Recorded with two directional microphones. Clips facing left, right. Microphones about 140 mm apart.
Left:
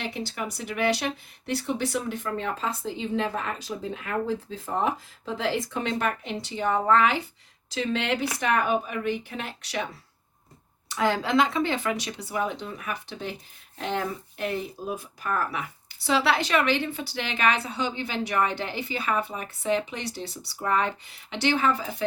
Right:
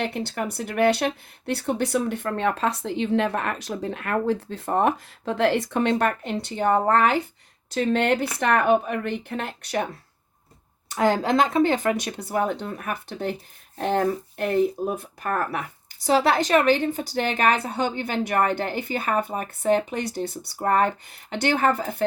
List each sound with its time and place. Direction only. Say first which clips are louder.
0.0 s speech: right 5 dB; 60° right (ahead or behind)